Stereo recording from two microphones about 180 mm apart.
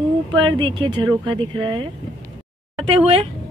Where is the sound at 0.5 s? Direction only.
25° right (ahead or behind).